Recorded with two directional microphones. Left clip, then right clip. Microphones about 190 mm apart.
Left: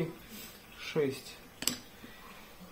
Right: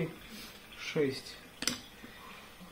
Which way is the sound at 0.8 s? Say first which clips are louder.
Even; 40° left (ahead or behind).